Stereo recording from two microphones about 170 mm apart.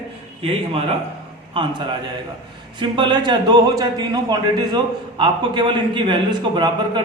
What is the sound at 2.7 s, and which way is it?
Speech, 25° right (ahead or behind).